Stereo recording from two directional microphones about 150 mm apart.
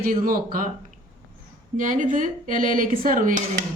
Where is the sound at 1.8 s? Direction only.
60° right (ahead or behind).